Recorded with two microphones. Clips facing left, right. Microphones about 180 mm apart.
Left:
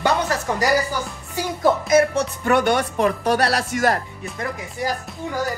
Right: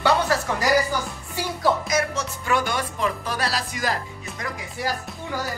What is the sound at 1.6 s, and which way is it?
Music, 55° left (ahead or behind).